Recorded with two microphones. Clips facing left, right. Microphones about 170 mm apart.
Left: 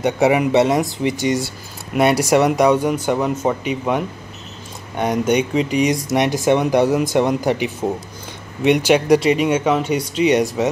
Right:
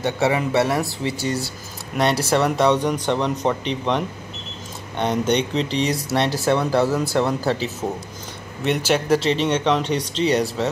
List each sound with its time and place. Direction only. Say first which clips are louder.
0.0 s speech: left 5 dB; 15° left (ahead or behind)